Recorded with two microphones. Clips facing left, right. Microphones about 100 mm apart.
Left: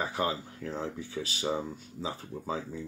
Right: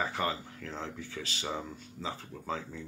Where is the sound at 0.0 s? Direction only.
10° left (ahead or behind).